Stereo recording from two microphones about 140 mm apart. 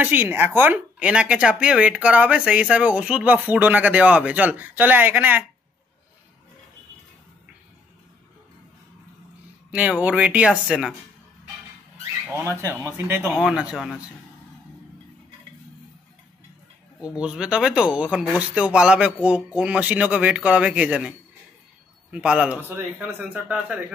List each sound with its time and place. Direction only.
0.0 s speech: 15° right (ahead or behind)
9.8 s speech: 10° right (ahead or behind)
12.5 s speech: 20° right (ahead or behind)
17.2 s speech: 5° right (ahead or behind)
22.1 s speech: 5° right (ahead or behind)